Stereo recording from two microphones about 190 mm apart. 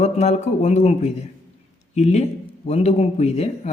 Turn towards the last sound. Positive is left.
turn(degrees=35)  # may be behind; listen again after turning